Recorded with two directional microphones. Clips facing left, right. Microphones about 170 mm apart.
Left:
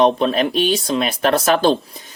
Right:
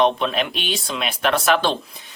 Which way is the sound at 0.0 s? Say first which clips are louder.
Left 4 dB; 40° left (ahead or behind).